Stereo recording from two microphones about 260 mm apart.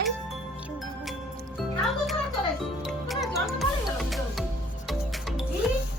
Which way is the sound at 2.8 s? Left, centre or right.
Centre.